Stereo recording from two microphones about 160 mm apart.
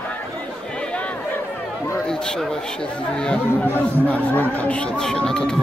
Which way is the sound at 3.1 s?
5° left (ahead or behind).